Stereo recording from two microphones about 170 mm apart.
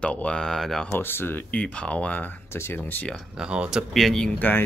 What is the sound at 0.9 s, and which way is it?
Speech, 15° left (ahead or behind).